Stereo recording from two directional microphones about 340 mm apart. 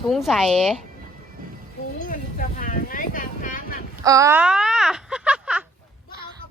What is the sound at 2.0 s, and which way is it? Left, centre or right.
Boat, left.